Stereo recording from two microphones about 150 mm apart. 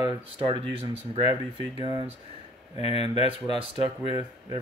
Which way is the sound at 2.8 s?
40° left (ahead or behind).